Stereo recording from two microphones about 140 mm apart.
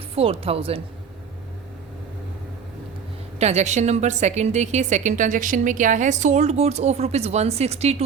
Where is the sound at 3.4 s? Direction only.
55° right (ahead or behind).